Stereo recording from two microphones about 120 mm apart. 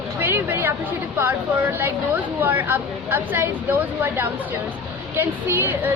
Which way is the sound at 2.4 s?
15° right (ahead or behind).